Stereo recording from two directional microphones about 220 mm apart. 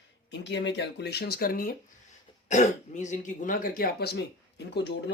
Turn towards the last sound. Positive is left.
turn(degrees=50)  # may be behind; listen again after turning